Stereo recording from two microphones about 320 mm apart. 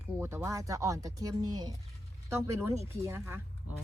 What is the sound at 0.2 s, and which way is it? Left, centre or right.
Speech, centre.